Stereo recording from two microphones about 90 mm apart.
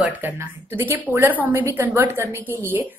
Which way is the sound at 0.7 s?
25° right (ahead or behind).